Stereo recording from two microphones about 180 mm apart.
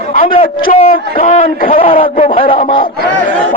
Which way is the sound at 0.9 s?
50° left (ahead or behind).